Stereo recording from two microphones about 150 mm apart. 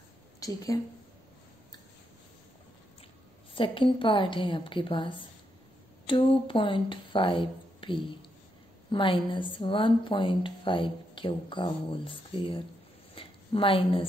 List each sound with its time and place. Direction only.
0.4 s a woman's voice: 25° left (ahead or behind)
3.5 s a woman's voice: 35° left (ahead or behind)
13.1 s a sound: 35° left (ahead or behind)